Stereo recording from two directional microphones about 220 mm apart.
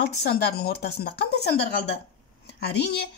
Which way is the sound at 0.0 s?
45° left (ahead or behind).